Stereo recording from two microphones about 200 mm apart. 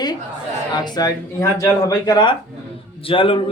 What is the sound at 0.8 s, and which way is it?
Speech, 20° left (ahead or behind).